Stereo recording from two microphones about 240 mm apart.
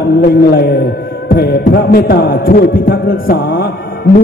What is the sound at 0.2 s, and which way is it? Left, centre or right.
Music, left.